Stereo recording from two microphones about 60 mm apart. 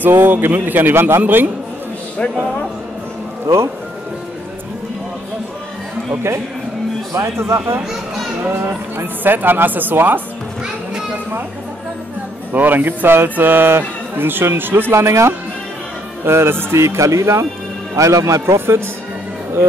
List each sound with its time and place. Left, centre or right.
0.0 s speech: right
3.5 s a man's voice: right
7.2 s speech: right
8.5 s speech: right
12.5 s a man's voice: right